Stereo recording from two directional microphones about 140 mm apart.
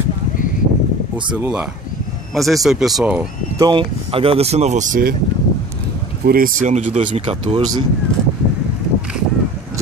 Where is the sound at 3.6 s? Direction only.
35° right (ahead or behind); by 5.2 s 80° right.